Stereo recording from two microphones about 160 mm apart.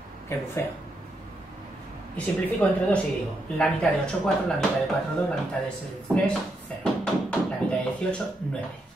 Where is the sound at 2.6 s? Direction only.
10° left (ahead or behind).